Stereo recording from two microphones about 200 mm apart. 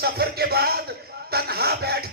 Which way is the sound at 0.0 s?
50° right (ahead or behind).